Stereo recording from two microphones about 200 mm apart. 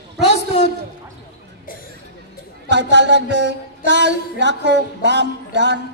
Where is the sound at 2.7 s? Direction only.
60° right (ahead or behind).